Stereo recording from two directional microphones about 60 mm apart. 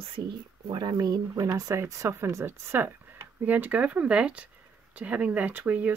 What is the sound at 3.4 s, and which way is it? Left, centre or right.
Speech, right.